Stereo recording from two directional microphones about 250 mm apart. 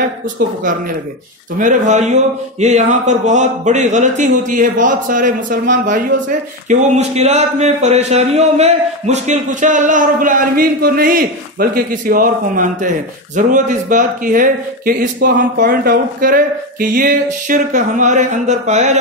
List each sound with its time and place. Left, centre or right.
0.4 s speech: right
1.6 s speech: right